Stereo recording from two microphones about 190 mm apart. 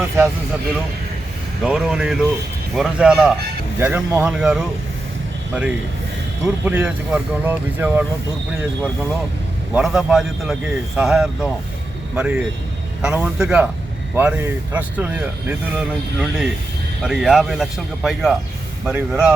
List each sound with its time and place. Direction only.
1.6 s a man's voice: 5° right (ahead or behind)
6.4 s a man's voice: 5° right (ahead or behind)